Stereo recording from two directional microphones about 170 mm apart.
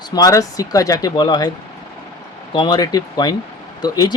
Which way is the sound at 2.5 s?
25° left (ahead or behind).